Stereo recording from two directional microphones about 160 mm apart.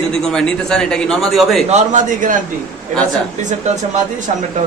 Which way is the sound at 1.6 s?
50° right (ahead or behind).